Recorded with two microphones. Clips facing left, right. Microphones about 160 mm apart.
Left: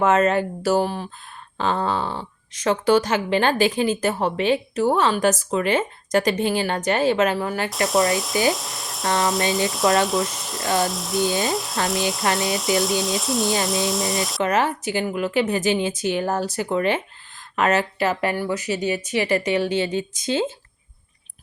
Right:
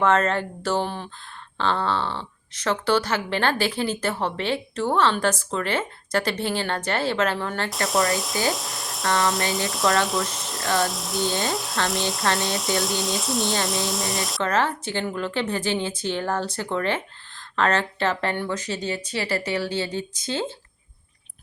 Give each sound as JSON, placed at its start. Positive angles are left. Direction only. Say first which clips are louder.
{"t": 0.0, "sound": "speech", "louder": "left 3 dB", "side_deg": 15}
{"t": 1.5, "sound": "speech", "louder": "left 1 dB", "side_deg": 15}
{"t": 14.4, "sound": "speech", "louder": "left 2 dB", "side_deg": 15}